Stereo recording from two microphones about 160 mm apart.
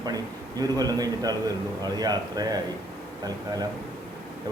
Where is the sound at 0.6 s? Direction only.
25° right (ahead or behind).